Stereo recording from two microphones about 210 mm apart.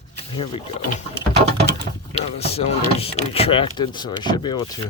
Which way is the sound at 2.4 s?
30° left (ahead or behind).